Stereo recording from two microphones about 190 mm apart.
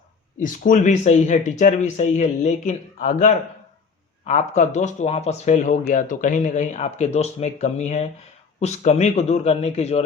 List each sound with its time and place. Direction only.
0.3 s speech: 45° left (ahead or behind)